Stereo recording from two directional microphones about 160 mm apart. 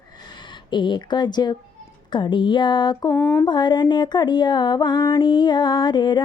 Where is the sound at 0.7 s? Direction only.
30° left (ahead or behind).